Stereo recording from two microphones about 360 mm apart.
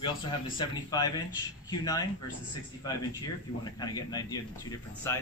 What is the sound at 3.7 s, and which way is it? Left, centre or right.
Speech, centre.